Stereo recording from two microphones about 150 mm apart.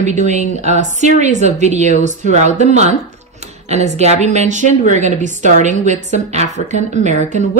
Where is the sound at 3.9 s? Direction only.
50° right (ahead or behind).